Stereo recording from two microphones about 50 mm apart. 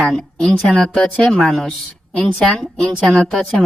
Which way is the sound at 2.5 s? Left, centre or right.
Centre.